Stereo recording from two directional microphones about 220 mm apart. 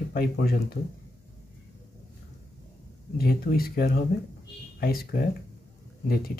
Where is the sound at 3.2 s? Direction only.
40° left (ahead or behind).